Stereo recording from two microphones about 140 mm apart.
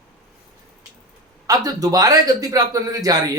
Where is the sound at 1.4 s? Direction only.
25° right (ahead or behind).